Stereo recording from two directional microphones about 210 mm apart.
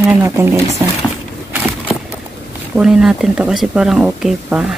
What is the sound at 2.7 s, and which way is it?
Speech, centre (ahead or behind).